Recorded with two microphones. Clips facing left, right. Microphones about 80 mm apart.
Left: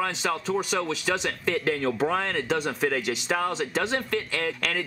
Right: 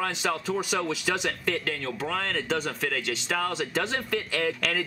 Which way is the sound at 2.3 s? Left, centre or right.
Centre.